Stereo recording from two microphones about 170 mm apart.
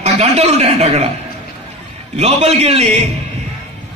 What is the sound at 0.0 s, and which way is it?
A man's voice, 40° right (ahead or behind).